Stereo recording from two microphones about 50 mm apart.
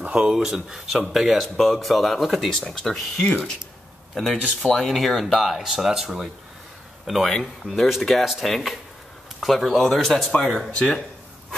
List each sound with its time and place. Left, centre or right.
0.0 s a sound: right
0.3 s speech: centre
0.9 s speech: centre
2.6 s speech: centre